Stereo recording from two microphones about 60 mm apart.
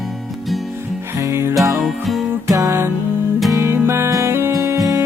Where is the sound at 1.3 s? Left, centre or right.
Right.